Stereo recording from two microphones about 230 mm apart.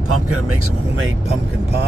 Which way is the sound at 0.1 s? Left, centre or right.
Right.